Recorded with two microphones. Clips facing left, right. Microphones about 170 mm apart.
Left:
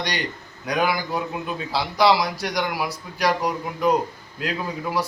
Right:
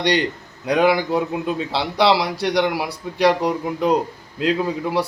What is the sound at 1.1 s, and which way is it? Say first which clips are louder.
A man's voice: right 6 dB; 30° right (ahead or behind).